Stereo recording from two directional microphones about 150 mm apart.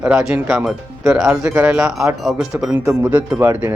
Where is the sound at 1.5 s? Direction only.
15° right (ahead or behind).